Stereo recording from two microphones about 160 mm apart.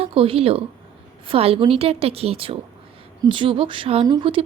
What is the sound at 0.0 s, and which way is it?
Speech, 35° right (ahead or behind).